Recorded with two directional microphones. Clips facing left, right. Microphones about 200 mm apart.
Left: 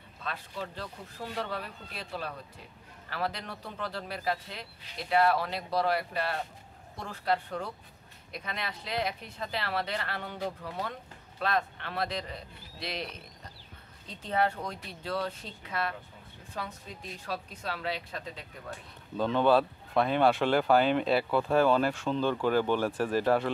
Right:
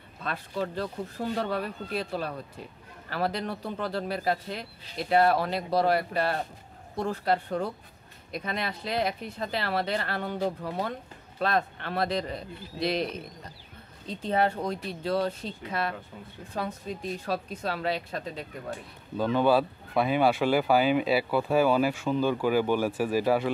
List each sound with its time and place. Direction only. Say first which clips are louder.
0.2 s speech: right 6 dB; 45° right (ahead or behind)
14.0 s speech: right 3 dB; 30° right (ahead or behind)
17.3 s speech: right 4 dB; 45° right (ahead or behind)
19.1 s speech: right 1 dB; 5° right (ahead or behind)